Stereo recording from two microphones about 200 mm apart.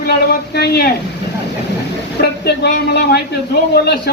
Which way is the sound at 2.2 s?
55° left (ahead or behind).